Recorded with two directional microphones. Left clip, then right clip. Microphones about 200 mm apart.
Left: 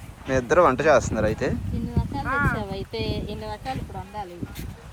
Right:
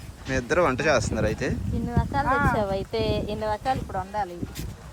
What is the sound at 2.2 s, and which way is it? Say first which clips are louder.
Speech: even; 50° right (ahead or behind).